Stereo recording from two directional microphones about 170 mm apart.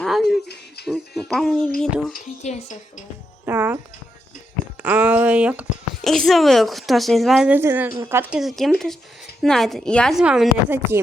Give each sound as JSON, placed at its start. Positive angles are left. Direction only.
{"t": 0.0, "sound": "a sound", "side_deg": 0}
{"t": 0.9, "sound": "speech", "side_deg": 0}
{"t": 2.1, "sound": "speech", "side_deg": 45}
{"t": 3.4, "sound": "speech", "side_deg": -10}
{"t": 4.8, "sound": "speech", "side_deg": -10}